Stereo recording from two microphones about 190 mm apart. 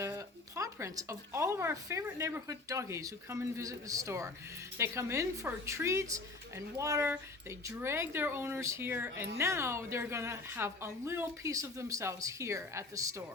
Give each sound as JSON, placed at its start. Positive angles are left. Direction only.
{"t": 0.0, "sound": "speech", "side_deg": -15}